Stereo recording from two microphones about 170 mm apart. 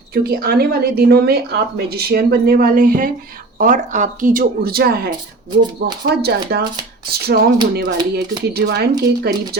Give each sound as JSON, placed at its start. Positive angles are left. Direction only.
{"t": 0.1, "sound": "a woman's voice", "side_deg": -65}